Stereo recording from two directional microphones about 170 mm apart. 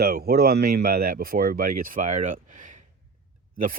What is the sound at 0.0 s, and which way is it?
Speech, 65° right (ahead or behind).